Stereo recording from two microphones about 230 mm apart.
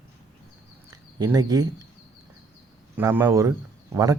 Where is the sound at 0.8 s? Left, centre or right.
Centre.